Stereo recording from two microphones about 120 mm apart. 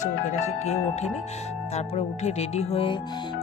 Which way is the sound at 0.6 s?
65° left (ahead or behind).